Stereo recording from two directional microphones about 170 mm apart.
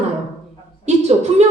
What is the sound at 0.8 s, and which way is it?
Speech, 40° right (ahead or behind).